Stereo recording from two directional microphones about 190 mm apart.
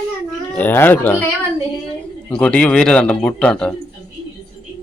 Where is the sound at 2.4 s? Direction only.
5° left (ahead or behind).